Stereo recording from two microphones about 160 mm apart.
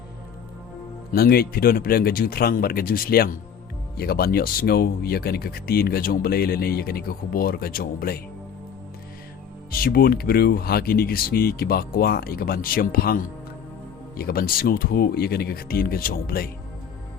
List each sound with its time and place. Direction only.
1.1 s speech: 70° left (ahead or behind)
9.7 s speech: 70° left (ahead or behind)